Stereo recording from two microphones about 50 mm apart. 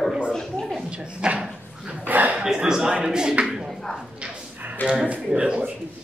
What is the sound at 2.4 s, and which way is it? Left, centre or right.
Speech, centre.